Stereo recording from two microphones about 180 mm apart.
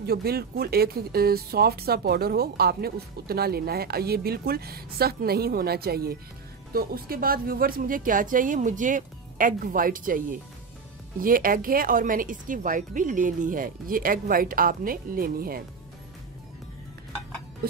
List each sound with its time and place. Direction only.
0.0 s speech: 60° right (ahead or behind)